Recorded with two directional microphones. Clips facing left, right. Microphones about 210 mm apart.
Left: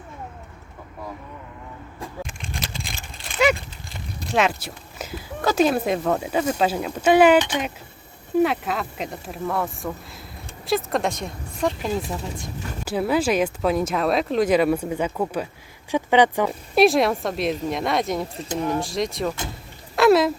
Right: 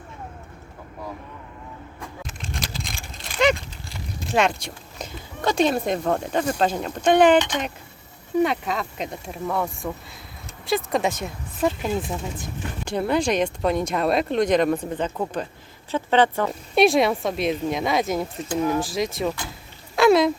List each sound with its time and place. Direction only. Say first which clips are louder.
4.4 s speech: even; 5° left (ahead or behind)
16.5 s speech: left 1 dB; centre (ahead or behind)
20.0 s a sound: even; centre (ahead or behind)